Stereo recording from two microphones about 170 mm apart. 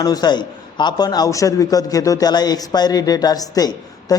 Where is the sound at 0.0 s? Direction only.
25° left (ahead or behind).